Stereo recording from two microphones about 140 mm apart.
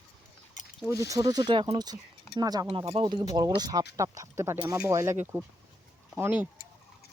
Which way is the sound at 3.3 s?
30° right (ahead or behind).